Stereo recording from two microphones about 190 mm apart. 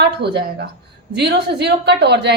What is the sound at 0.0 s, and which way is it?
A woman's voice, 60° right (ahead or behind).